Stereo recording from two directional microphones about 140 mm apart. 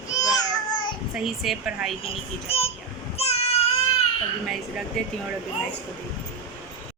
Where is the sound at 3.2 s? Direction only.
45° left (ahead or behind).